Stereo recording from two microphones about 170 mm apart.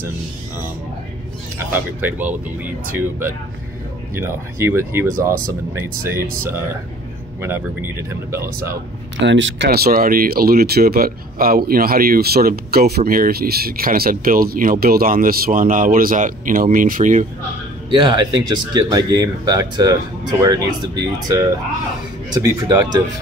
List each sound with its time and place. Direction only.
1.7 s speech: 10° right (ahead or behind)
7.4 s speech: 15° right (ahead or behind)
9.2 s speech: 90° right; by 17.3 s 50° right (ahead or behind)
17.8 s speech: 30° right (ahead or behind)